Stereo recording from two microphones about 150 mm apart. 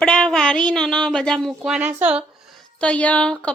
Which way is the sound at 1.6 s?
10° right (ahead or behind).